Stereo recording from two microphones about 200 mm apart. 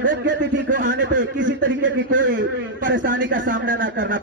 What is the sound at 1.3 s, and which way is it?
A man's voice, 70° right (ahead or behind).